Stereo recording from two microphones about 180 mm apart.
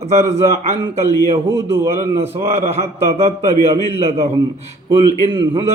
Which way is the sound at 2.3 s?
35° right (ahead or behind).